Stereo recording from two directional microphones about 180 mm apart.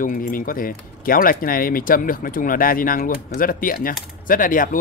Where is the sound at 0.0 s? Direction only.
50° left (ahead or behind).